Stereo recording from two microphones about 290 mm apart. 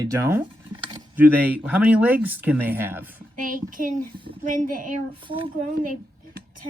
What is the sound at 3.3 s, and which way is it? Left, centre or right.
A child's voice, right.